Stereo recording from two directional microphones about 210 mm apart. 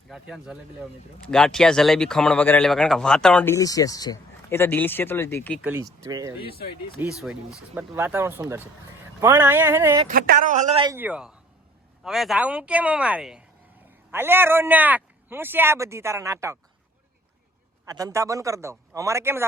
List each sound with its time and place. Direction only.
0.1 s speech: 5° right (ahead or behind)
5.6 s a man's voice: 10° right (ahead or behind)
7.2 s a man's voice: 5° right (ahead or behind)
10.1 s speech: 40° right (ahead or behind)
10.8 s a man's voice: 10° right (ahead or behind)
17.8 s a man's voice: 15° right (ahead or behind)